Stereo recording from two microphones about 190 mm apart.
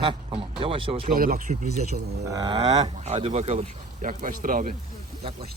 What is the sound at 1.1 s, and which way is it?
Speech, 45° right (ahead or behind).